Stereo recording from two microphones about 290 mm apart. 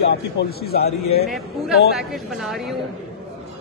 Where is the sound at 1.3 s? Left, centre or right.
Centre.